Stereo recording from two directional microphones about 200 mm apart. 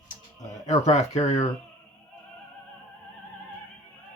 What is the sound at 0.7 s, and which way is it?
Speech, 35° left (ahead or behind).